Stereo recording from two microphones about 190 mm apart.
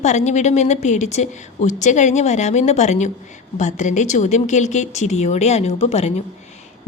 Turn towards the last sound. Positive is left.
turn(degrees=35)  # may be behind; listen again after turning